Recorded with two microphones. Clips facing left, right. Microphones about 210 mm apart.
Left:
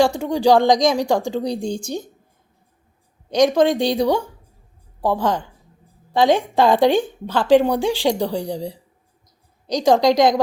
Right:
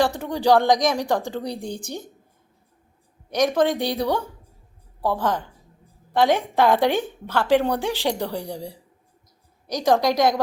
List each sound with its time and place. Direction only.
0.0 s a woman's voice: 15° left (ahead or behind)
3.2 s a woman's voice: 15° left (ahead or behind)